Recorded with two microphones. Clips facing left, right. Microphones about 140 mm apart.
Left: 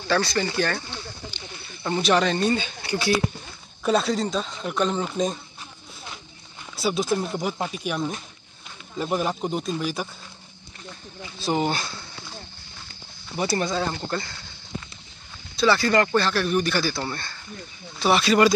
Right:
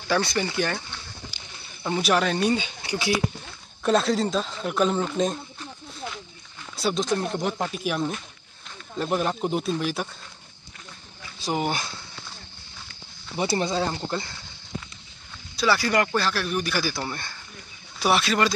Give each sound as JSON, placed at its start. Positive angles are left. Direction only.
{"t": 0.1, "sound": "speech", "side_deg": -20}
{"t": 3.8, "sound": "speech", "side_deg": 0}
{"t": 6.8, "sound": "speech", "side_deg": 5}
{"t": 11.3, "sound": "speech", "side_deg": -10}
{"t": 13.4, "sound": "speech", "side_deg": -25}
{"t": 15.5, "sound": "speech", "side_deg": -5}